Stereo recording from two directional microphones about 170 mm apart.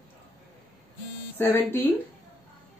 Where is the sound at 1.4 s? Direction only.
10° left (ahead or behind).